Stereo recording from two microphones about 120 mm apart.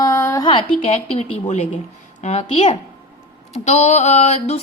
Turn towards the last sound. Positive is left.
turn(degrees=65)  # may be behind; listen again after turning